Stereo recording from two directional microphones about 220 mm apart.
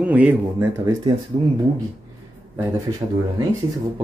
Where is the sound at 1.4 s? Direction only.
25° right (ahead or behind).